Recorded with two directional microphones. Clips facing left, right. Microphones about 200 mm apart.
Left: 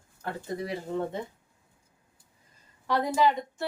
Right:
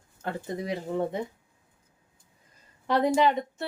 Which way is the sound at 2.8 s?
20° right (ahead or behind).